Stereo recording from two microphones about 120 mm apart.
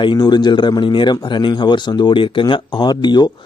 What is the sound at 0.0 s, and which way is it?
Speech, 40° left (ahead or behind).